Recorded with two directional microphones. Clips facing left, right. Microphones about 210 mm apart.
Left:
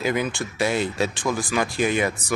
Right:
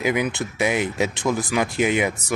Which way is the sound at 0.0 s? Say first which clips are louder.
Right 2 dB; 15° right (ahead or behind).